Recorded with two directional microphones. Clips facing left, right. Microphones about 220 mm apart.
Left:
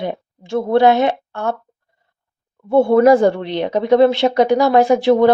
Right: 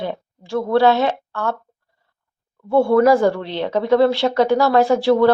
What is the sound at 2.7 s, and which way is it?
Speech, 20° left (ahead or behind).